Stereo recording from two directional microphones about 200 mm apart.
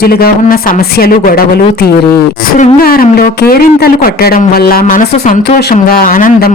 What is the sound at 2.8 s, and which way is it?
Speech, 50° left (ahead or behind).